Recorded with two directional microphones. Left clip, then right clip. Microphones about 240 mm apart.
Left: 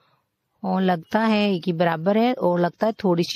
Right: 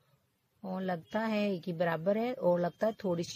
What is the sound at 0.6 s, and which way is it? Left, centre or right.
Speech, left.